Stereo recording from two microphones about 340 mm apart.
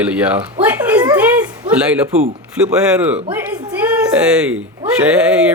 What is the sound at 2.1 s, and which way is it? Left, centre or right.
Speech, centre.